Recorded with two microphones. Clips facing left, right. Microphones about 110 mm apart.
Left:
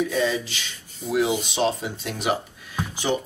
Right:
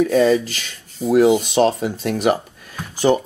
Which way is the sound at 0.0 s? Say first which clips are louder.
Right 9 dB; 50° right (ahead or behind).